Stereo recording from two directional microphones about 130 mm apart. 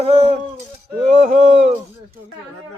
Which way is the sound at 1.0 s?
70° right (ahead or behind).